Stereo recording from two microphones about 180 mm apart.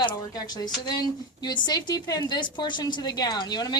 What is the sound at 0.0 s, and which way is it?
A woman's voice, 20° left (ahead or behind).